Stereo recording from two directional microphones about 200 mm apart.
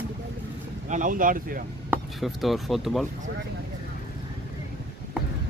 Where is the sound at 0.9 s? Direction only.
40° right (ahead or behind).